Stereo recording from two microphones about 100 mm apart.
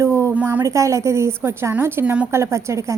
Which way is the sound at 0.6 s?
30° right (ahead or behind).